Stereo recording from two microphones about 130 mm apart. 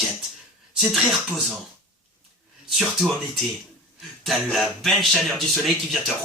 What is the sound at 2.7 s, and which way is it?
Speech, centre (ahead or behind).